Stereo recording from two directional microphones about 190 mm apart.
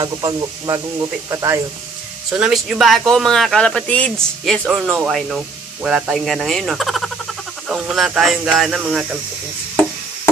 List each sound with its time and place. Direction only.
0.0 s speech: 20° right (ahead or behind)
2.3 s speech: 5° right (ahead or behind)